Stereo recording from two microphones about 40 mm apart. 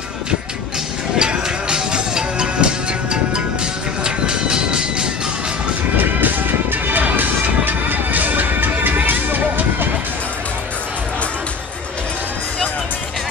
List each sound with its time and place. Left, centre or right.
1.1 s music: right
4.0 s train: right
5.9 s music: right